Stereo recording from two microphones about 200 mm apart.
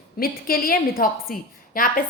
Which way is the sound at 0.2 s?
45° left (ahead or behind).